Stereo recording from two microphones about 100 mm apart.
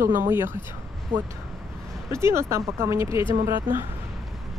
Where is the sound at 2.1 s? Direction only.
25° right (ahead or behind).